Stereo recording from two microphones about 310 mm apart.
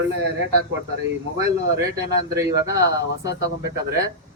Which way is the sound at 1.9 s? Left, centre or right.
Centre.